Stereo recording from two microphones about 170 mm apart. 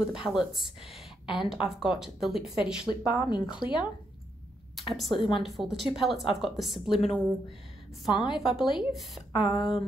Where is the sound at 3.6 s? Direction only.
25° left (ahead or behind).